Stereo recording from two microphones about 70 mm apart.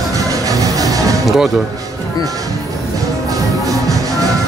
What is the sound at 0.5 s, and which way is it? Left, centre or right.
Music, right.